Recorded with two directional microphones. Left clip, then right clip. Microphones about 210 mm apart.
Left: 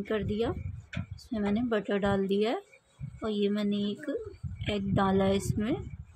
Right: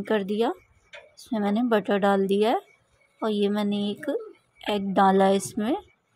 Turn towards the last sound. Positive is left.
turn(degrees=-15)  # may be behind; listen again after turning